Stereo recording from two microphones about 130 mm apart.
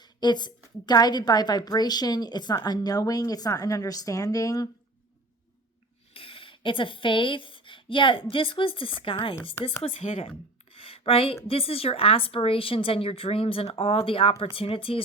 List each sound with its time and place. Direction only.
0.0 s a woman's voice: 35° left (ahead or behind)
6.1 s a woman's voice: 45° left (ahead or behind)